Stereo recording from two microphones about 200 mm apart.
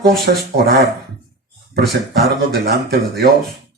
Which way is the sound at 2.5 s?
55° right (ahead or behind).